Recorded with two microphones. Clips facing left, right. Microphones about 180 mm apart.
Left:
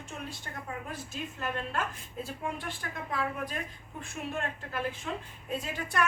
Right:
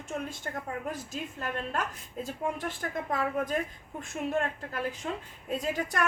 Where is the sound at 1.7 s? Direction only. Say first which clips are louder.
Right 1 dB; 40° right (ahead or behind).